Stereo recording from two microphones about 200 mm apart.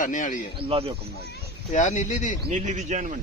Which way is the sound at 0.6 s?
30° right (ahead or behind).